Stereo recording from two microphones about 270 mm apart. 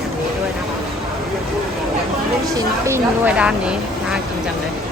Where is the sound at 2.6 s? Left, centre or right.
Centre.